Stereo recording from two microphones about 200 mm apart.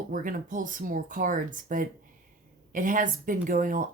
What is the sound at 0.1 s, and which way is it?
Speech, 40° right (ahead or behind).